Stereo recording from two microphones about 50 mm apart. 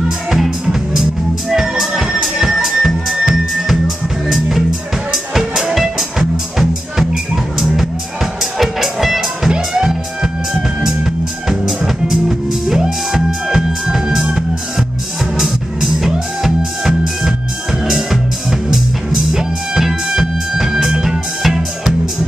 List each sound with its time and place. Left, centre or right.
0.3 s music: centre
15.3 s music: centre